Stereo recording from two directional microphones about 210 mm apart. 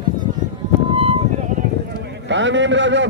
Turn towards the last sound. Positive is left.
turn(degrees=-60)  # may be behind; listen again after turning